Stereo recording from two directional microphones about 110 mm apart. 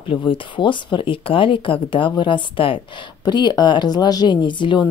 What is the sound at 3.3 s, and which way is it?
A woman's voice, 40° left (ahead or behind).